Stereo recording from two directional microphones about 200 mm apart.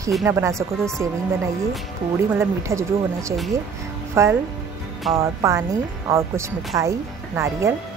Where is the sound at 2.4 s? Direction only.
15° right (ahead or behind).